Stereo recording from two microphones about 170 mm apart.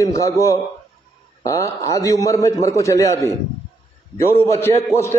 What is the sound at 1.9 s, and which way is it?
A man's voice, 20° left (ahead or behind).